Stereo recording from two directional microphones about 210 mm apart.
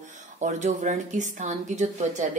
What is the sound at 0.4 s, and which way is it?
Speech, 35° right (ahead or behind).